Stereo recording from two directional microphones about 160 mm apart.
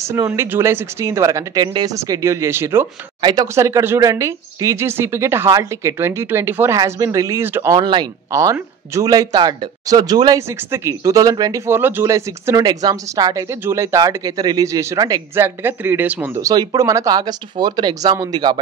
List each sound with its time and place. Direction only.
0.0 s speech: 15° right (ahead or behind)
3.2 s speech: 25° right (ahead or behind)